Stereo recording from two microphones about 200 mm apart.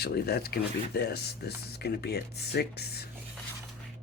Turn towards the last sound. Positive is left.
turn(degrees=55)  # may be behind; listen again after turning